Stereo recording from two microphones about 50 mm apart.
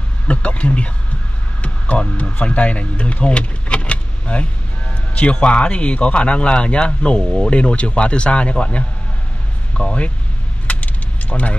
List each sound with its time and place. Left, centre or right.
0.3 s speech: left
10.7 s keys jangling: left